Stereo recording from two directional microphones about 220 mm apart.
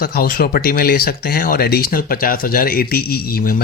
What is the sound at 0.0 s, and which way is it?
Speech, 40° left (ahead or behind).